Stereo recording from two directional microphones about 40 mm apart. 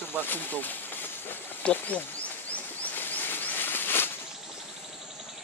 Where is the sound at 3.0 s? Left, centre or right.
Left.